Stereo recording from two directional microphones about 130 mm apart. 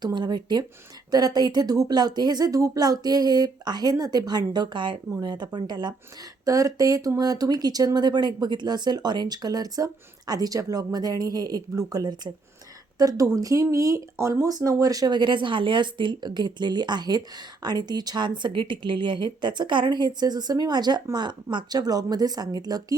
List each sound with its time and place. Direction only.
0.0 s speech: 35° right (ahead or behind)